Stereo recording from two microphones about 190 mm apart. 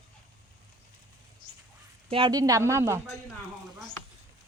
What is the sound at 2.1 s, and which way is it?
Speech, 25° right (ahead or behind).